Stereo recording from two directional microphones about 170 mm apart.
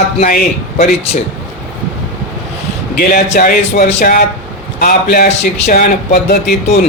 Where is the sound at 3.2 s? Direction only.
50° left (ahead or behind).